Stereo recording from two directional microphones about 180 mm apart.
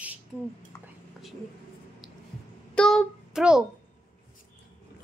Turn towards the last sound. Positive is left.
turn(degrees=-5)  # may be behind; listen again after turning